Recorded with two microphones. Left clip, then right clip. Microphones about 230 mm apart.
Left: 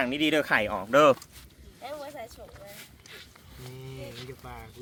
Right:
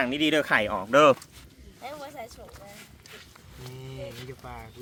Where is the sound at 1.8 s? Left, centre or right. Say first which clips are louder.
Even; left.